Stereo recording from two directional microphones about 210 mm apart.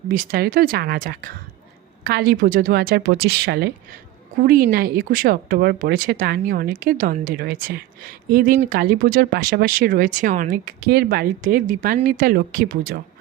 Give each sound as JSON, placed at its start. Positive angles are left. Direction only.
{"t": 0.1, "sound": "speech", "side_deg": -45}